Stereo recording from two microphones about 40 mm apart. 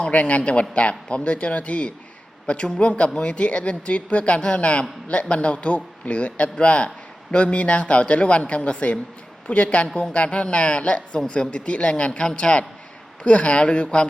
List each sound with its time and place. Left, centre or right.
0.0 s speech: left
2.6 s speech: centre